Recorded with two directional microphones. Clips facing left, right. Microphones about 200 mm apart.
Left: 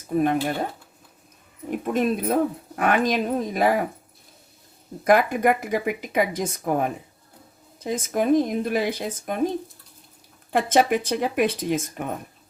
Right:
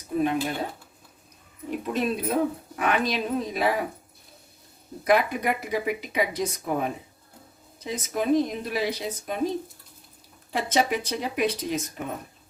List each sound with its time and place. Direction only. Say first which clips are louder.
0.2 s speech: left 3 dB; 50° left (ahead or behind)
1.8 s speech: left 4 dB; 50° left (ahead or behind)
5.0 s speech: left 4 dB; 50° left (ahead or behind)
10.5 s speech: left 5 dB; 55° left (ahead or behind)